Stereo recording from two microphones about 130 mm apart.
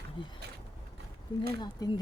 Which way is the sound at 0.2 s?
35° left (ahead or behind).